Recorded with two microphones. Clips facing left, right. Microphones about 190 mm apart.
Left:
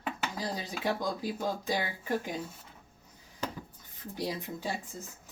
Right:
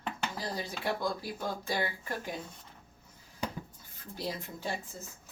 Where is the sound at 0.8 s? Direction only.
15° left (ahead or behind).